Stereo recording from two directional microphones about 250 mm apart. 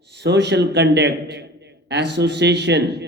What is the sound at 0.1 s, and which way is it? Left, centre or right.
A man's voice, right.